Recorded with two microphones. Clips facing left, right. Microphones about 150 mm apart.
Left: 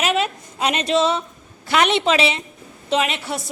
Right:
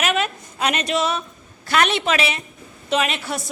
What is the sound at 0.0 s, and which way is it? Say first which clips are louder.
A woman's voice: left 1 dB; 25° left (ahead or behind).